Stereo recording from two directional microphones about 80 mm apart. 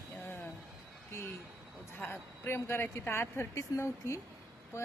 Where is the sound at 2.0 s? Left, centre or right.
Left.